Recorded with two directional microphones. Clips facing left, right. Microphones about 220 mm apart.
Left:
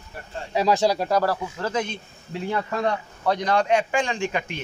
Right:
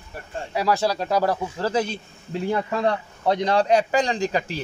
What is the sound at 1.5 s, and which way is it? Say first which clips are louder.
Speech: right 3 dB; 35° right (ahead or behind).